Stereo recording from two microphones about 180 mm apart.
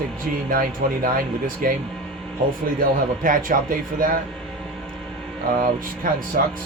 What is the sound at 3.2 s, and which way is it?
Speech, 50° right (ahead or behind).